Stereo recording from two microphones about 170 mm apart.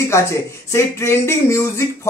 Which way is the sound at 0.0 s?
15° left (ahead or behind).